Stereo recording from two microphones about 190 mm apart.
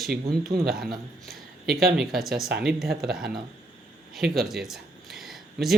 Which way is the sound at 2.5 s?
60° right (ahead or behind).